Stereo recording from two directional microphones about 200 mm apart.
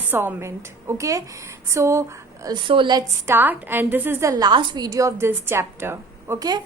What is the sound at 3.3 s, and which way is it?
A woman's voice, 10° right (ahead or behind).